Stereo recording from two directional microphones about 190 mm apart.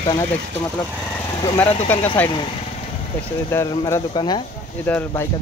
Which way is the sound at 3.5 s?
15° left (ahead or behind).